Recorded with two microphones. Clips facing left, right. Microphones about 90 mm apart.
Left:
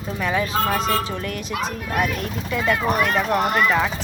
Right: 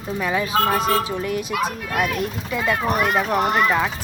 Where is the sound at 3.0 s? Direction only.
10° right (ahead or behind).